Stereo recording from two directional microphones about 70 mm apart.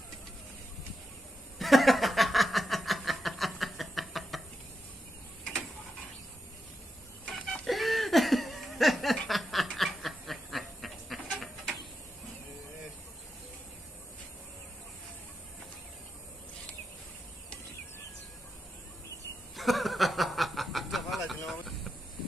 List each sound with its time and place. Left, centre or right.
1.6 s snicker: centre
7.3 s chicken: centre
7.6 s laughter: centre
9.3 s snicker: centre
9.8 s a sound: centre
19.5 s snicker: centre
21.5 s vehicle: centre